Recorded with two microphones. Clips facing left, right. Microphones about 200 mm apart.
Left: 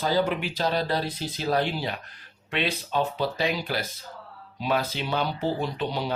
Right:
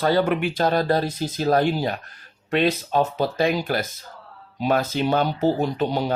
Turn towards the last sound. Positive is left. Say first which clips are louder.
# right 6 dB
turn(degrees=-45)  # may be behind; listen again after turning